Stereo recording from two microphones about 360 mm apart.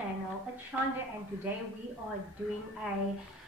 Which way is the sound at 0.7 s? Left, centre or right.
Centre.